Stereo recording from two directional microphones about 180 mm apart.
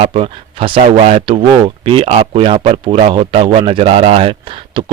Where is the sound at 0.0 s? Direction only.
35° right (ahead or behind).